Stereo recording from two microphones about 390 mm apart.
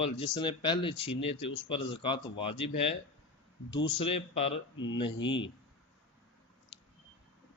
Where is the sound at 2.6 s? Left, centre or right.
Left.